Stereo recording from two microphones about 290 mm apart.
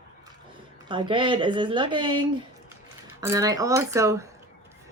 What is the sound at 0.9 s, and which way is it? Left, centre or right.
Speech, centre.